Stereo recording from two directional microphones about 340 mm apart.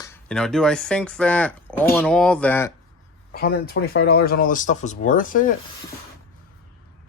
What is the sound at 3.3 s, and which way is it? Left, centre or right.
Speech, left.